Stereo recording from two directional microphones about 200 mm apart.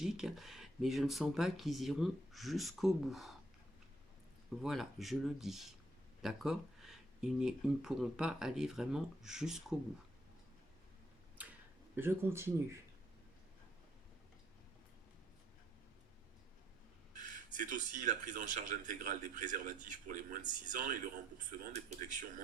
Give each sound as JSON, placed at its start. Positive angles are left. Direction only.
{"t": 0.0, "sound": "speech", "side_deg": 0}
{"t": 4.6, "sound": "speech", "side_deg": 0}
{"t": 11.4, "sound": "tick-tock", "side_deg": -10}
{"t": 11.9, "sound": "speech", "side_deg": -10}
{"t": 17.2, "sound": "speech", "side_deg": -40}